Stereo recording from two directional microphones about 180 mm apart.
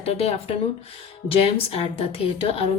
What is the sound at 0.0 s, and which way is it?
A woman's voice, 35° left (ahead or behind).